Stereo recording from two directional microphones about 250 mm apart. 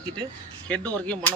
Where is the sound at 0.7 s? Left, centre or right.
Centre.